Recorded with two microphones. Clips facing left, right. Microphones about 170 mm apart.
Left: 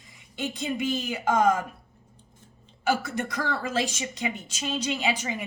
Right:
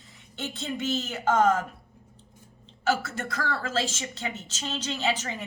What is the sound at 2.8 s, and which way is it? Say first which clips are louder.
A woman's voice: left 1 dB; 15° left (ahead or behind).